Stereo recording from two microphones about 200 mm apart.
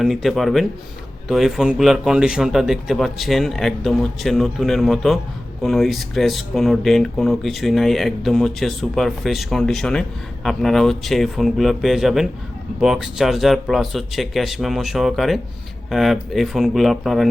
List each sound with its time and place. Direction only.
0.0 s speech: centre (ahead or behind)